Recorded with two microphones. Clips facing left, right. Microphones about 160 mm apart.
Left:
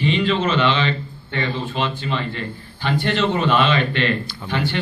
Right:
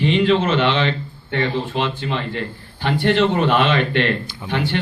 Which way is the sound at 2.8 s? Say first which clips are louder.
Right 3 dB; 55° right (ahead or behind).